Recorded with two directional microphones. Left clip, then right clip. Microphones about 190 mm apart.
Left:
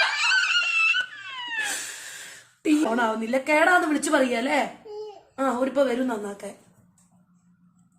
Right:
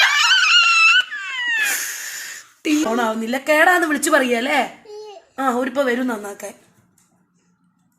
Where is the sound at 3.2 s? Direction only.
40° right (ahead or behind).